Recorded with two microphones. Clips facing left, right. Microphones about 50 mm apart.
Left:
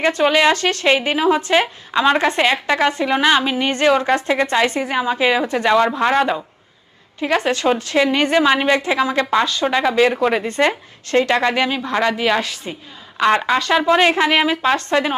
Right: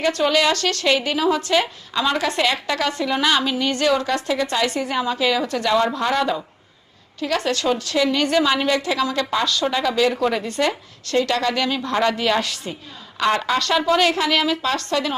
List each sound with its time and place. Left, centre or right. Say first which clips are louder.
0.0 s a woman's voice: left 4 dB; left
11.8 s a woman's voice: left 2 dB; centre
13.1 s a woman's voice: left 4 dB; left